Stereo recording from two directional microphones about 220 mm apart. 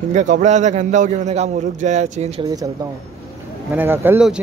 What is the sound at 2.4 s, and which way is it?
Speech, 15° right (ahead or behind).